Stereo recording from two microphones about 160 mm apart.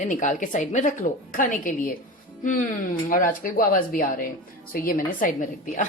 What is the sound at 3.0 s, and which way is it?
Speech, 60° left (ahead or behind).